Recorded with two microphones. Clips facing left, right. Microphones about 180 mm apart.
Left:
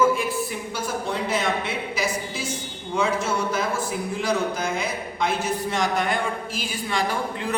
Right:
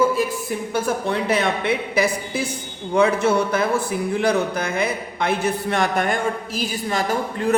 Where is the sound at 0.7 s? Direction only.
60° right (ahead or behind).